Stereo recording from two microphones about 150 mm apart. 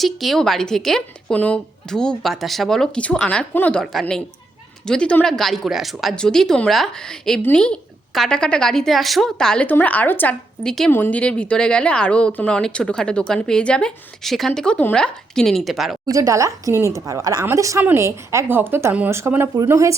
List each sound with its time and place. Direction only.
0.0 s speech: centre (ahead or behind)
16.0 s a woman's voice: 20° right (ahead or behind)